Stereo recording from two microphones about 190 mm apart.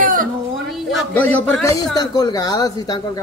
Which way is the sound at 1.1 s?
10° left (ahead or behind).